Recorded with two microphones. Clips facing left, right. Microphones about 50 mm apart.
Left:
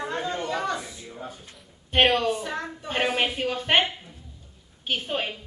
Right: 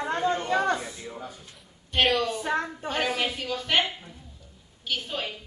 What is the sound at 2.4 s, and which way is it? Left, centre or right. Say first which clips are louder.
Speech: right 4 dB; right.